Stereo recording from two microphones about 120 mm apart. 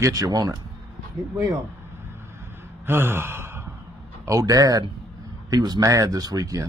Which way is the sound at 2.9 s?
20° right (ahead or behind).